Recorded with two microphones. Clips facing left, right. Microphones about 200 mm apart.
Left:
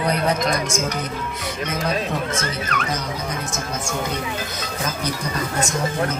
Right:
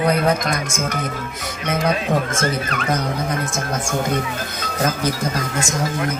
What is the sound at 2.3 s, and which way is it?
Speech, 50° right (ahead or behind).